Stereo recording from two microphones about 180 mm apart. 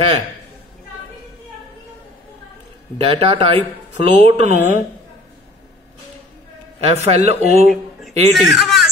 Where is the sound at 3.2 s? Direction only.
30° right (ahead or behind).